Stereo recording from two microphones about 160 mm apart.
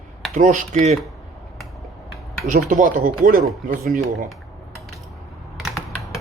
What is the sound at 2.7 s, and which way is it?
Speech, 55° right (ahead or behind).